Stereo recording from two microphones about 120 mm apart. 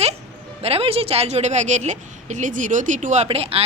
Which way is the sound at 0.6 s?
55° right (ahead or behind).